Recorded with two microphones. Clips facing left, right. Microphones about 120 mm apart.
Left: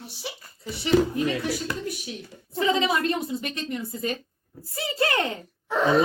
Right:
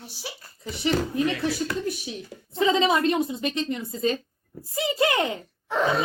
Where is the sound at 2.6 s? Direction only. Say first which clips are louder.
Right 2 dB; 25° right (ahead or behind).